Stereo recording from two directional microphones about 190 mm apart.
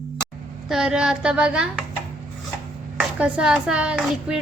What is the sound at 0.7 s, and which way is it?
Speech, 5° right (ahead or behind).